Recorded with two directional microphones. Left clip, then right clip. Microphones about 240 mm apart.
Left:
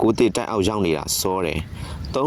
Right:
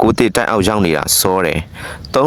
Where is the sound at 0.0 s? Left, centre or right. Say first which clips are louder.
Right 6 dB; right.